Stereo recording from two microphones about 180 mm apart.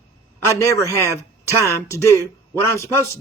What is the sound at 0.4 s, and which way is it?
A man's voice, 15° left (ahead or behind).